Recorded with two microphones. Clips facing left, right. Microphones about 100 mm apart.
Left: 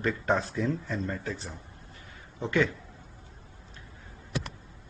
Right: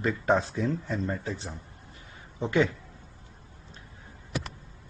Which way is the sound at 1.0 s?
15° right (ahead or behind).